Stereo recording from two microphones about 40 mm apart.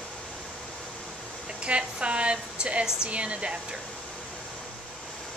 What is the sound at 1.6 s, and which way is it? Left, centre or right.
Speech, right.